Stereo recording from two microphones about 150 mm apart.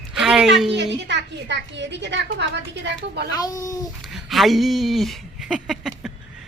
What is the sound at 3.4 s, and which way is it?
Speech, 20° left (ahead or behind).